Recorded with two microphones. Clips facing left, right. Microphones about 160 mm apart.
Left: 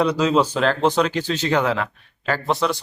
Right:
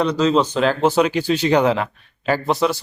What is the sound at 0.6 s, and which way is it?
Speech, 5° right (ahead or behind).